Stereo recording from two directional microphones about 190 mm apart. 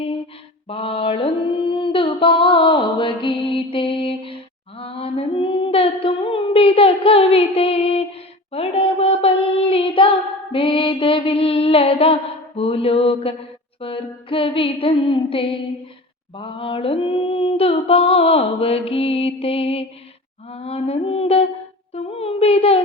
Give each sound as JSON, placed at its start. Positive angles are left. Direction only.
{"t": 0.7, "sound": "mantra", "side_deg": 30}
{"t": 4.8, "sound": "female singing", "side_deg": 30}
{"t": 8.5, "sound": "child singing", "side_deg": 30}
{"t": 10.5, "sound": "mantra", "side_deg": 25}
{"t": 12.5, "sound": "a sound", "side_deg": 30}